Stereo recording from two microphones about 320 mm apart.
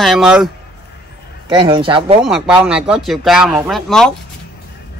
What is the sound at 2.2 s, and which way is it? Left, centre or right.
Speech, centre.